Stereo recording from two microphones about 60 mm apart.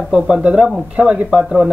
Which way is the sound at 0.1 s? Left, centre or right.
Centre.